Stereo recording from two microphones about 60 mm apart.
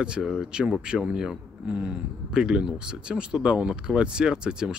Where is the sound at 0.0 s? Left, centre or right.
Centre.